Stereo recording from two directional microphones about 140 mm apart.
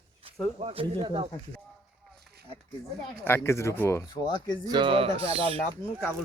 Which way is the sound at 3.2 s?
15° left (ahead or behind).